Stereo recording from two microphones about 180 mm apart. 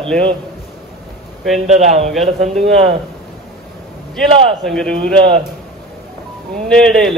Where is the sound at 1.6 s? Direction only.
40° right (ahead or behind).